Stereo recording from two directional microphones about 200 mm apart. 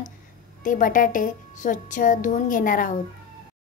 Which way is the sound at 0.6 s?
40° left (ahead or behind).